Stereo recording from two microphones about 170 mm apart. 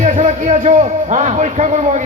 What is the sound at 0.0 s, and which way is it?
A man's voice, 45° right (ahead or behind).